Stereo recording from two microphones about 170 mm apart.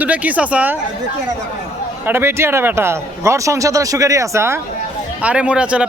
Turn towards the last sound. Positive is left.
turn(degrees=-5)  # may be behind; listen again after turning